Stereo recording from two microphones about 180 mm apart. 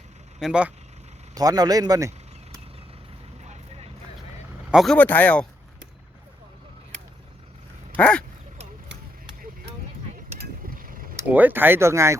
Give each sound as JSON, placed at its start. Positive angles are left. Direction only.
{"t": 0.3, "sound": "speech", "side_deg": -5}
{"t": 1.4, "sound": "speech", "side_deg": -20}
{"t": 3.4, "sound": "vehicle", "side_deg": -40}
{"t": 4.7, "sound": "speech", "side_deg": 0}
{"t": 4.9, "sound": "speech", "side_deg": 10}
{"t": 7.9, "sound": "speech", "side_deg": 5}
{"t": 10.3, "sound": "mechanisms", "side_deg": -50}
{"t": 11.3, "sound": "speech", "side_deg": -10}